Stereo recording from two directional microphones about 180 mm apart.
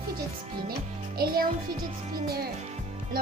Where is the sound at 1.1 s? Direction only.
60° right (ahead or behind).